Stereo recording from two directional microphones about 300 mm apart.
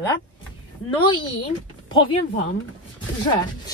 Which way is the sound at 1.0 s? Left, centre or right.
Centre.